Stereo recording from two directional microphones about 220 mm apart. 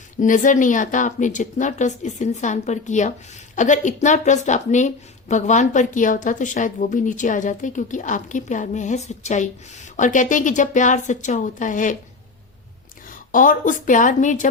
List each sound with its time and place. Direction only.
0.2 s a woman's voice: 35° left (ahead or behind)
13.1 s a woman's voice: 35° left (ahead or behind)